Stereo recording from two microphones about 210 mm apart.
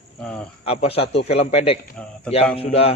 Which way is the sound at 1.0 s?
55° left (ahead or behind).